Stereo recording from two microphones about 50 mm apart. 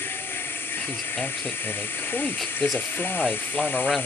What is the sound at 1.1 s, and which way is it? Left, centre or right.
Speech, left.